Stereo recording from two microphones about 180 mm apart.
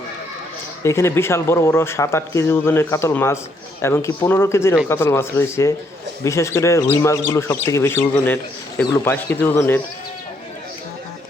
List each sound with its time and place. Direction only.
0.9 s speech: 15° left (ahead or behind)